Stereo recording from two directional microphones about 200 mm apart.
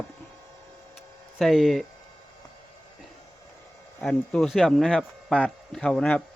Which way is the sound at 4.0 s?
5° left (ahead or behind).